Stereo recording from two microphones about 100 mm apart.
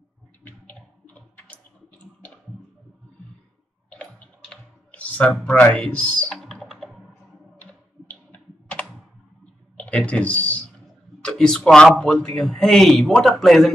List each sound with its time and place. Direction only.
0.4 s a sound: 15° left (ahead or behind)
3.9 s clicking: 10° left (ahead or behind)
5.4 s speech: 15° left (ahead or behind)
6.4 s typing: centre (ahead or behind)
8.1 s a sound: 15° left (ahead or behind)
11.1 s a man's voice: 10° left (ahead or behind)